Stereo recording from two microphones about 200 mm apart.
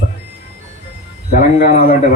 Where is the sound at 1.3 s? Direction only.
35° left (ahead or behind).